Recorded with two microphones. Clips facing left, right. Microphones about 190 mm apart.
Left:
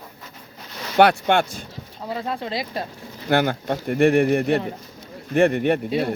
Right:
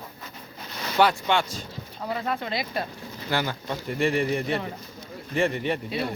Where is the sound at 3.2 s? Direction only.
55° left (ahead or behind).